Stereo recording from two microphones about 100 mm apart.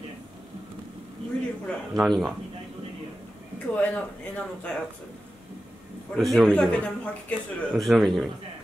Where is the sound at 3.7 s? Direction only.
10° left (ahead or behind).